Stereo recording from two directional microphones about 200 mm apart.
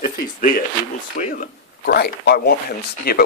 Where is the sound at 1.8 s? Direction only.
50° left (ahead or behind).